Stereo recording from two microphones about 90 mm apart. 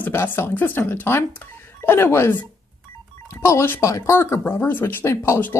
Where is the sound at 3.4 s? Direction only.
30° left (ahead or behind).